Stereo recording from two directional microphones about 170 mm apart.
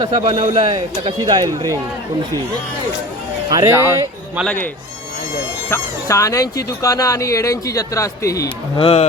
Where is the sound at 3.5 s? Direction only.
20° right (ahead or behind).